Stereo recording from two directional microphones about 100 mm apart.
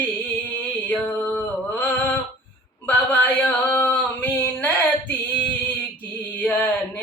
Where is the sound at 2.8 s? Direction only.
20° left (ahead or behind).